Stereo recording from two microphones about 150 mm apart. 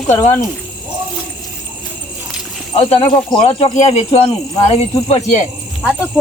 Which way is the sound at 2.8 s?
35° left (ahead or behind).